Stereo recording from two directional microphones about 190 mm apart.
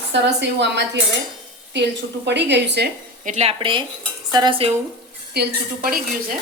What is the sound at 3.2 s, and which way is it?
Speech, 35° right (ahead or behind).